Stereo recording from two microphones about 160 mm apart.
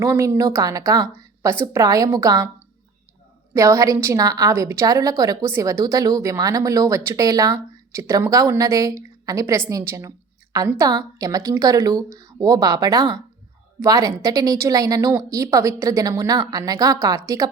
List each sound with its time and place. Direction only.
0.0 s a woman's voice: 15° right (ahead or behind)
3.5 s a woman's voice: 20° right (ahead or behind)